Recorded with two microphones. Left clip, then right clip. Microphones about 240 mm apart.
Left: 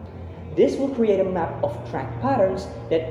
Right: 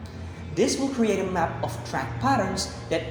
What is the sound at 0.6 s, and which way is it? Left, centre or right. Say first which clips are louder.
A woman's voice: left 5 dB; right.